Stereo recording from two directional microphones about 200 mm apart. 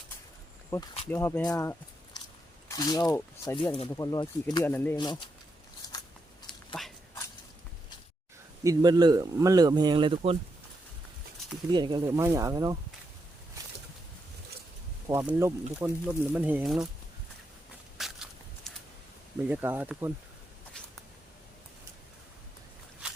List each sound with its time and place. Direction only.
0.7 s speech: 15° left (ahead or behind)
3.6 s speech: 25° left (ahead or behind); by 4.9 s 10° left (ahead or behind)
4.9 s speech: 20° left (ahead or behind)
6.8 s speech: centre (ahead or behind)
8.6 s speech: 20° right (ahead or behind)
11.7 s speech: 20° right (ahead or behind)
15.0 s speech: 10° right (ahead or behind)
17.9 s a sound: centre (ahead or behind)
19.5 s speech: 10° right (ahead or behind)